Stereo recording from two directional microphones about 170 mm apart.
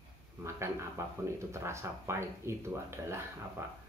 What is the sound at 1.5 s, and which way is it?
Speech, 15° right (ahead or behind).